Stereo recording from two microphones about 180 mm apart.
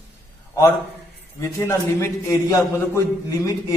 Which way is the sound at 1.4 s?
15° left (ahead or behind).